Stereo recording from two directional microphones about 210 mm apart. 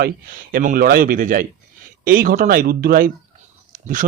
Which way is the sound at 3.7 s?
35° right (ahead or behind).